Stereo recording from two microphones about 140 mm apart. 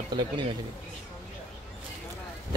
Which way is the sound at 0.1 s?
30° right (ahead or behind).